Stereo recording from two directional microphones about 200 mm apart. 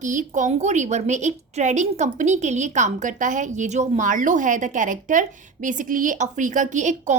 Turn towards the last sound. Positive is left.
turn(degrees=-40)  # may be behind; listen again after turning